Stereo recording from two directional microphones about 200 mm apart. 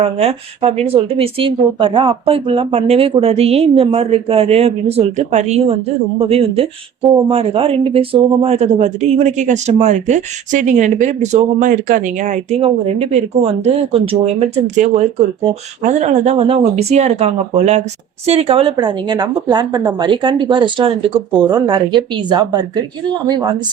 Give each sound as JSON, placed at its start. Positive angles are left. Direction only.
{"t": 0.0, "sound": "speech", "side_deg": -30}